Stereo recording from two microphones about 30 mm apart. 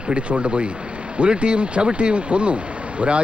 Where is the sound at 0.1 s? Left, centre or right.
Right.